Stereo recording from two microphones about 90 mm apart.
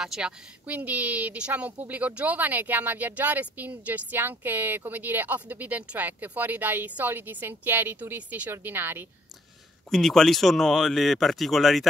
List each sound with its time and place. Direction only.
0.0 s speech: 5° right (ahead or behind)
0.7 s a woman's voice: 15° right (ahead or behind)
9.8 s speech: 5° left (ahead or behind)